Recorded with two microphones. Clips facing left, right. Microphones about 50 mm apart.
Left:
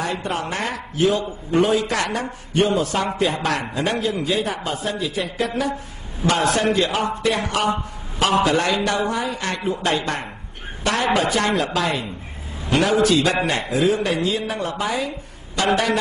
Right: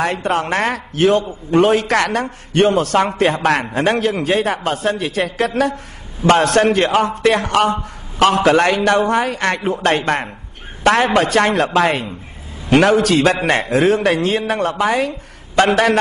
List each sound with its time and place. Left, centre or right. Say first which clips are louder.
0.0 s a man's voice: right 6 dB; right